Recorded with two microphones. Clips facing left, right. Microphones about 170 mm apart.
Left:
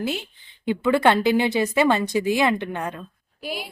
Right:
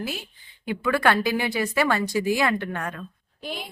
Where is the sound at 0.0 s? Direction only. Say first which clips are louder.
Left 5 dB; 20° left (ahead or behind).